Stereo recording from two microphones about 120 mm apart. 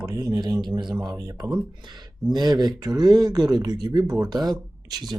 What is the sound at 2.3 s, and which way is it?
Speech, 35° right (ahead or behind).